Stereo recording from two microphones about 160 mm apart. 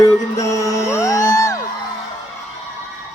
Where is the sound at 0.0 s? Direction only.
20° left (ahead or behind).